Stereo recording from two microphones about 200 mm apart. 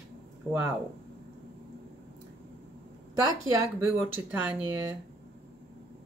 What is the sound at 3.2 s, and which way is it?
Speech, 20° right (ahead or behind).